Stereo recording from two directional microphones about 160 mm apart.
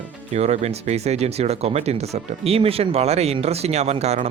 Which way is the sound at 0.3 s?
40° right (ahead or behind).